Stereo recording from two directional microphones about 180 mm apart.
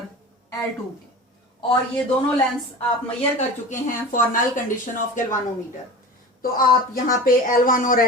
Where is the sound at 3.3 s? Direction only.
45° left (ahead or behind).